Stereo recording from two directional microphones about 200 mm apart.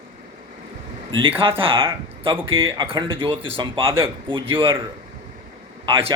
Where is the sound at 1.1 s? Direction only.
25° right (ahead or behind).